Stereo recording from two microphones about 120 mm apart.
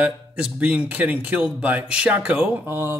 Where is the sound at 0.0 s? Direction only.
10° right (ahead or behind).